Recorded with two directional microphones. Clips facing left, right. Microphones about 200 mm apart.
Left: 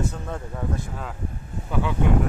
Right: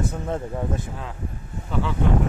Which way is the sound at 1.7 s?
10° left (ahead or behind).